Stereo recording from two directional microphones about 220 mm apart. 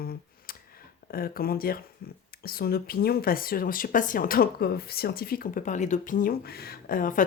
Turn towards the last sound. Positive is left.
turn(degrees=40)  # may be behind; listen again after turning